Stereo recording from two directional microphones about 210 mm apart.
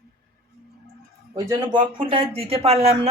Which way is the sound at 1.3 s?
15° right (ahead or behind).